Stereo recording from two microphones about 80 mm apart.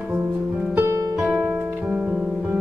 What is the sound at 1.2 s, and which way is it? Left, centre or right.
Music, centre.